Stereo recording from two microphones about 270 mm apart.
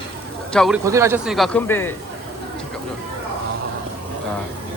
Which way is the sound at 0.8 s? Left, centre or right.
Centre.